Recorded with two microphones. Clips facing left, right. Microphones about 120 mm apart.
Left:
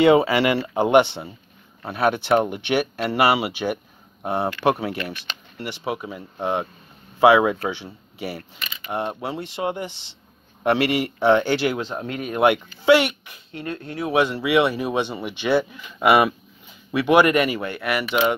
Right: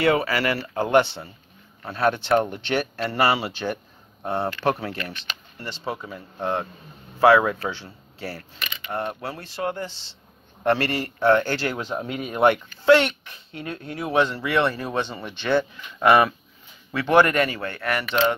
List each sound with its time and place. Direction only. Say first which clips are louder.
0.0 s speech: left 5 dB; 20° left (ahead or behind)
11.8 s speech: even; 5° right (ahead or behind)